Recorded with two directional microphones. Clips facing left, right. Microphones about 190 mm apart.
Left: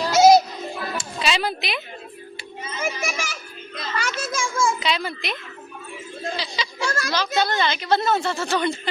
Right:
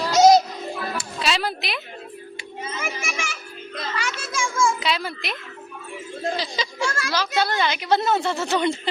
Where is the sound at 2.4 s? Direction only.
40° left (ahead or behind).